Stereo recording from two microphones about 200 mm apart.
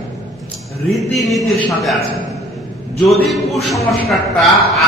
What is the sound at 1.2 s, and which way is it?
Speech, centre (ahead or behind).